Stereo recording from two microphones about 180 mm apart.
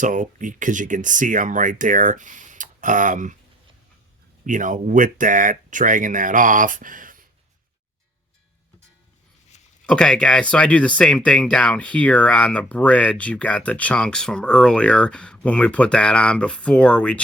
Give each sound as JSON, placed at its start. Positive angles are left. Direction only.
{"t": 0.0, "sound": "speech", "side_deg": -45}
{"t": 4.4, "sound": "speech", "side_deg": -45}
{"t": 9.8, "sound": "speech", "side_deg": 5}